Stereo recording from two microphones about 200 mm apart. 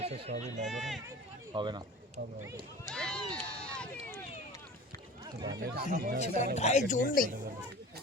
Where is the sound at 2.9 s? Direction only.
5° left (ahead or behind).